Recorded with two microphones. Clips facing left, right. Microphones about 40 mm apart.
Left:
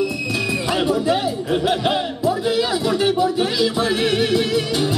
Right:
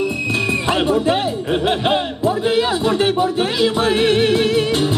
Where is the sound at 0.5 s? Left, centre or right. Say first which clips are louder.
Right 2 dB; right.